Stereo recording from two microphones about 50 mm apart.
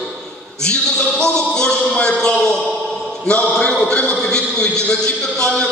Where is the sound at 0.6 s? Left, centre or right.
Centre.